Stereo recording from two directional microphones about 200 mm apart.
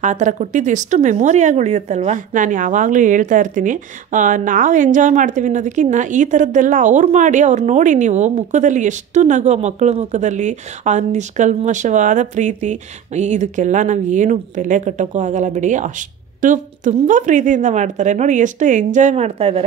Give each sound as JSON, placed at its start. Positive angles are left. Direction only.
{"t": 0.0, "sound": "speech", "side_deg": -35}